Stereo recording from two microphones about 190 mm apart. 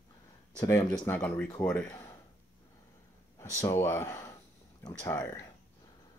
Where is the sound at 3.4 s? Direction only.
15° left (ahead or behind).